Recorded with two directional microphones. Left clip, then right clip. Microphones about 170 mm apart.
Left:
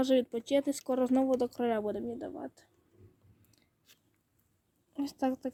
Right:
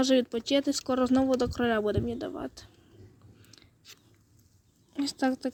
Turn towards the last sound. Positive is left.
turn(degrees=0)  # may be behind; listen again after turning